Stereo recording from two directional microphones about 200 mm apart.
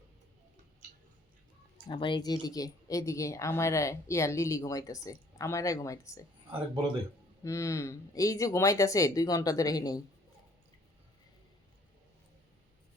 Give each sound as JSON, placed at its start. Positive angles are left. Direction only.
{"t": 1.9, "sound": "a woman's voice", "side_deg": 25}
{"t": 7.4, "sound": "a woman's voice", "side_deg": 15}